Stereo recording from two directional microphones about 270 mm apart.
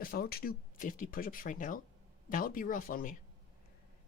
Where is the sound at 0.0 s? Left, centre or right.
Left.